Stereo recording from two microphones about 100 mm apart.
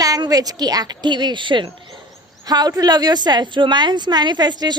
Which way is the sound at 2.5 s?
40° right (ahead or behind).